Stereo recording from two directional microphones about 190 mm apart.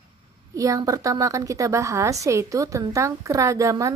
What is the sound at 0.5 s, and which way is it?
A woman's voice, 20° right (ahead or behind).